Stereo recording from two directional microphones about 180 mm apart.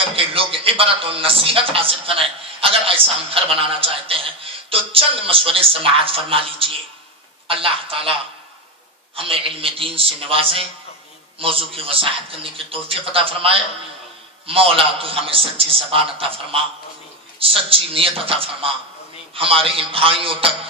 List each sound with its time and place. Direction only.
0.0 s a man's voice: 30° right (ahead or behind)